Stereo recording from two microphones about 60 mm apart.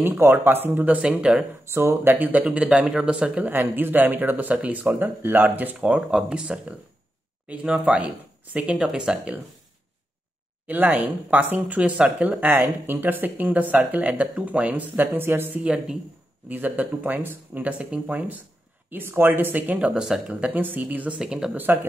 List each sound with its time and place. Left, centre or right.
0.0 s speech: right; by 1.4 s centre
1.6 s speech: right
2.1 s speech: right
3.4 s speech: right
5.8 s speech: centre
10.7 s speech: right
12.8 s speech: right
15.2 s speech: right
17.6 s speech: right
18.9 s speech: right
19.9 s speech: centre; by 21.2 s right
21.2 s speech: centre
21.7 s speech: right